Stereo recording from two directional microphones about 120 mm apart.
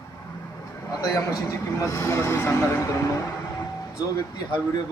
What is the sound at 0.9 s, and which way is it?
A man's voice, 30° left (ahead or behind).